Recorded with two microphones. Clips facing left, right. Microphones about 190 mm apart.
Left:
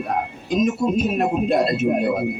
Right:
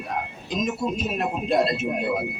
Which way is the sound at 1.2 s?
45° left (ahead or behind).